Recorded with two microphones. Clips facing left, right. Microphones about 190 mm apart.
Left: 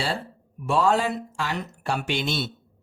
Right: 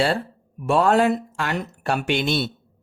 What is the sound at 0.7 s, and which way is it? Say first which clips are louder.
Speech: right 4 dB; 60° right (ahead or behind).